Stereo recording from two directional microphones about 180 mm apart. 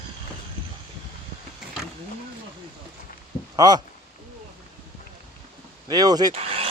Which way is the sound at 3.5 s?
20° right (ahead or behind).